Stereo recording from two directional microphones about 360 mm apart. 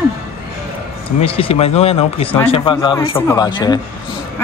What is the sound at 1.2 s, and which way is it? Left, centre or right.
A man's voice, centre.